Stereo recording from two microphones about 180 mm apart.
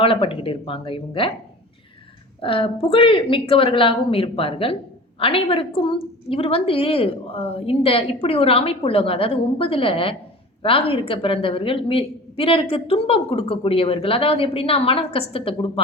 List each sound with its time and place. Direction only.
0.0 s speech: 30° left (ahead or behind)
2.4 s a woman's voice: 30° left (ahead or behind)